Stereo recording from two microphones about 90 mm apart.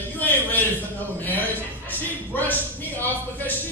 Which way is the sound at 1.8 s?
20° left (ahead or behind).